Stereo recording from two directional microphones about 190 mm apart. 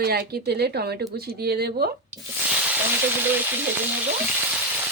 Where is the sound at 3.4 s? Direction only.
10° right (ahead or behind).